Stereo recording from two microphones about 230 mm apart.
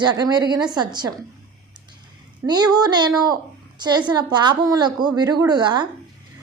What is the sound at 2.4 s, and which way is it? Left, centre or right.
A woman's voice, centre.